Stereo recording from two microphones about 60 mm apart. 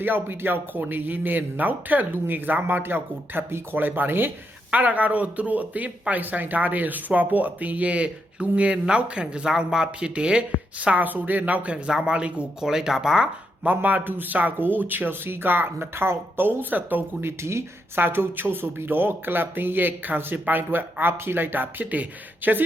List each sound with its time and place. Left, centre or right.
0.0 s speech: right
4.7 s speech: right
11.9 s speech: centre
13.7 s speech: right
17.2 s speech: right
17.9 s speech: right